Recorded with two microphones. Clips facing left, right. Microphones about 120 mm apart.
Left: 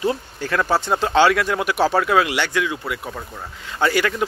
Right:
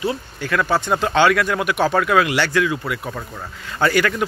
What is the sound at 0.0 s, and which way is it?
Speech, 35° left (ahead or behind).